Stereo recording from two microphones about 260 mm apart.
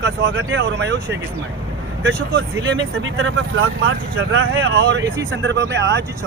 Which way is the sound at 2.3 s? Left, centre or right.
Right.